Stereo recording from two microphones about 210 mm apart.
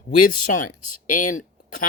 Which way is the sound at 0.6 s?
90° left.